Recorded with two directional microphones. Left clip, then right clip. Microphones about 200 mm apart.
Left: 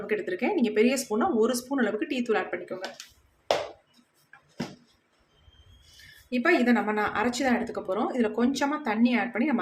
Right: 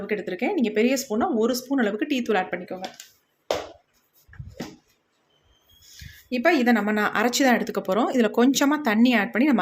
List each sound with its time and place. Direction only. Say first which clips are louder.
0.1 s speech: right 1 dB; 25° right (ahead or behind)
6.3 s speech: right 3 dB; 35° right (ahead or behind)